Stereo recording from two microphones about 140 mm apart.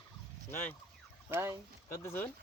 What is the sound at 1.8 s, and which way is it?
Turkey, 20° left (ahead or behind).